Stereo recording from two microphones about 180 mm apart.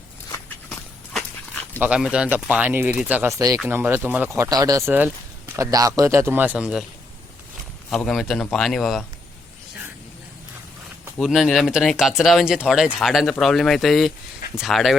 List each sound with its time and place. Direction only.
0.7 s dog: 5° left (ahead or behind)
1.8 s speech: 5° right (ahead or behind)
7.9 s speech: centre (ahead or behind)
11.0 s speech: centre (ahead or behind)